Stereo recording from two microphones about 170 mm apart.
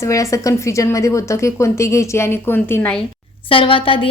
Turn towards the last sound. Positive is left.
turn(degrees=30)  # may be behind; listen again after turning